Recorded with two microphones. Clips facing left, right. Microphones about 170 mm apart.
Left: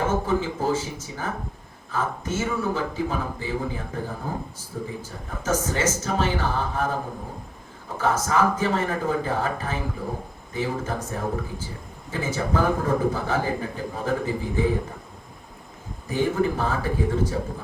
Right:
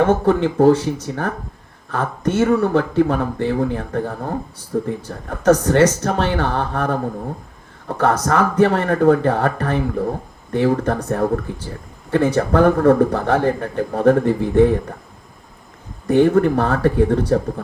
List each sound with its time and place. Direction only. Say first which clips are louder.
0.0 s a man's voice: right 8 dB; 65° right (ahead or behind)
16.0 s a man's voice: right 9 dB; 65° right (ahead or behind)